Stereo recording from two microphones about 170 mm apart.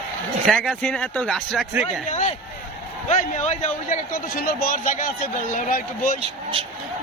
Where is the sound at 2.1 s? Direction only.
45° left (ahead or behind).